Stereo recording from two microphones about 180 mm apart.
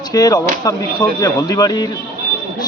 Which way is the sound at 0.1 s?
20° left (ahead or behind).